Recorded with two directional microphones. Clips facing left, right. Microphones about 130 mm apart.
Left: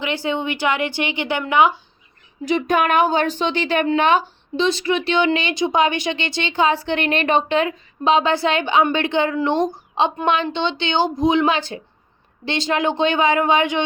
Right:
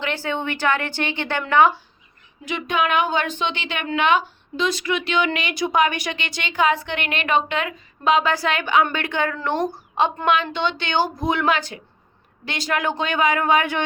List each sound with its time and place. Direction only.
0.0 s a woman's voice: 15° left (ahead or behind)
2.4 s a woman's voice: 35° left (ahead or behind); by 10.2 s 20° left (ahead or behind)
10.2 s a woman's voice: 30° left (ahead or behind)